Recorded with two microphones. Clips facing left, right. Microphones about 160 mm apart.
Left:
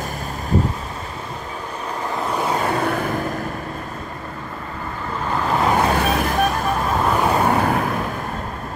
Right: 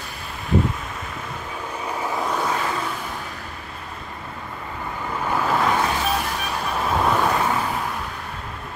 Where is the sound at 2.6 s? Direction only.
60° left (ahead or behind).